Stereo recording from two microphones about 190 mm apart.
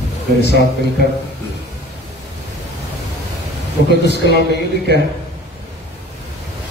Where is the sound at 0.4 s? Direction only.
60° left (ahead or behind).